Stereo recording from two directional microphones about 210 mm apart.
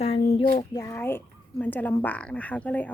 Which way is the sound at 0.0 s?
25° left (ahead or behind).